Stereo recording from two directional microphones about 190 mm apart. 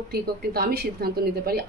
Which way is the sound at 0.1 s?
55° right (ahead or behind).